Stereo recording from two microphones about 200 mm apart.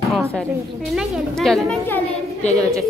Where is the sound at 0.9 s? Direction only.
Centre (ahead or behind).